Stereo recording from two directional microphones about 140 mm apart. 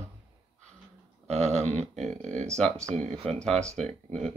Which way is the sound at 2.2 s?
55° right (ahead or behind).